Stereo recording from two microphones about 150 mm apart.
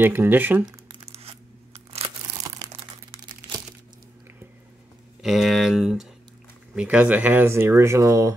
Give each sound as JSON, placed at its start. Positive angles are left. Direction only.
{"t": 0.0, "sound": "speech", "side_deg": -15}
{"t": 1.1, "sound": "a sound", "side_deg": -40}
{"t": 5.2, "sound": "speech", "side_deg": 0}